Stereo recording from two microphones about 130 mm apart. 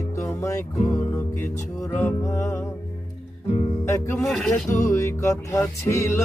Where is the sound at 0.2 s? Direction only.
25° left (ahead or behind).